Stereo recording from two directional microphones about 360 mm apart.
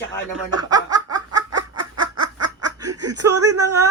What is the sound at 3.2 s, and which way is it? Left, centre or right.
Speech, right.